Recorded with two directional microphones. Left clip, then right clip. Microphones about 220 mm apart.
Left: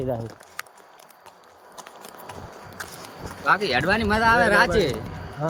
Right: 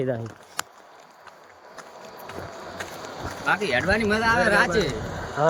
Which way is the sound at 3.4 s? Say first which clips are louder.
Left 2 dB; 20° left (ahead or behind).